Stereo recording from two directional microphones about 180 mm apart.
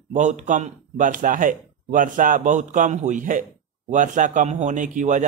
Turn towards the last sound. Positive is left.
turn(degrees=-45)  # may be behind; listen again after turning